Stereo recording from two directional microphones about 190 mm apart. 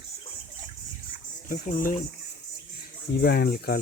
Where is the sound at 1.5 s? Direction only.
45° left (ahead or behind).